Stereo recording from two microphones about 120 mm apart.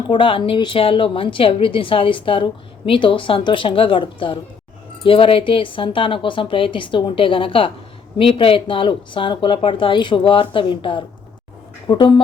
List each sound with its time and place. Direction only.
0.1 s a woman's voice: 45° left (ahead or behind)